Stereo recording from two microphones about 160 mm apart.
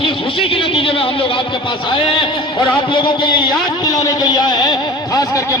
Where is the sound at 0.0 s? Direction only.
35° left (ahead or behind).